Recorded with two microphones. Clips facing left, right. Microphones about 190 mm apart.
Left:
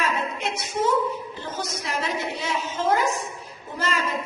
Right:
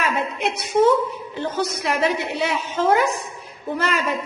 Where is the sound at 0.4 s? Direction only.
65° right (ahead or behind).